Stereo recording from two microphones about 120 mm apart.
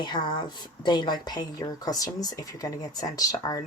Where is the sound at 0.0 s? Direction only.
40° left (ahead or behind).